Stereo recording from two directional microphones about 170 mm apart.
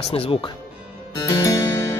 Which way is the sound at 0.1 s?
35° left (ahead or behind).